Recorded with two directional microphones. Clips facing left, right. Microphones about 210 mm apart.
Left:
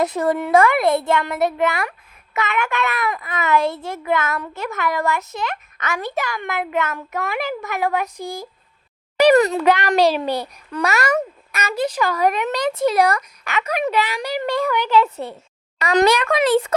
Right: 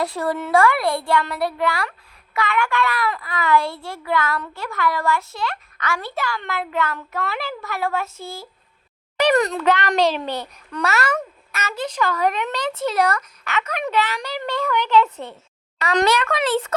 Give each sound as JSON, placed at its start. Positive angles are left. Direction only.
{"t": 0.0, "sound": "a child's voice", "side_deg": 20}